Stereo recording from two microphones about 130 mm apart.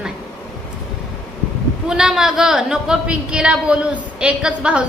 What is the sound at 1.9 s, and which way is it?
A woman's voice, 5° right (ahead or behind).